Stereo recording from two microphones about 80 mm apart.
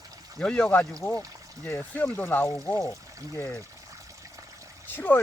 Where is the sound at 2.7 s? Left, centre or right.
Left.